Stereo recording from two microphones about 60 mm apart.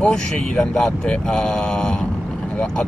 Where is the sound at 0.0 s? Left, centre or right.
Centre.